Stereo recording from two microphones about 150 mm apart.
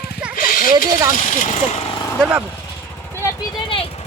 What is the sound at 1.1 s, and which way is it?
Speech, 55° left (ahead or behind).